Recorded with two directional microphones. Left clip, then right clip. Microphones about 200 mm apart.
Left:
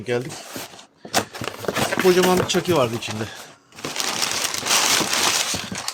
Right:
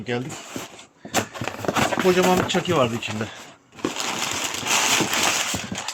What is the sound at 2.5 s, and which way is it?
Speech, 50° left (ahead or behind).